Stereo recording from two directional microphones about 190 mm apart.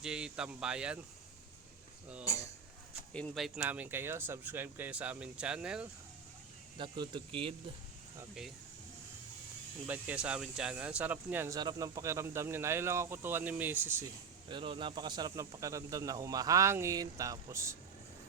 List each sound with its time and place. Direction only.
0.0 s speech: 5° right (ahead or behind)
2.2 s speech: 15° left (ahead or behind)
3.1 s speech: 5° left (ahead or behind)
6.7 s speech: 25° right (ahead or behind)
9.8 s speech: 10° right (ahead or behind)
14.4 s speech: 25° right (ahead or behind)